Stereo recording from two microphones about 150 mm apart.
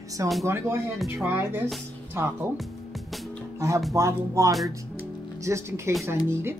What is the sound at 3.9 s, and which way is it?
Speech, 20° right (ahead or behind).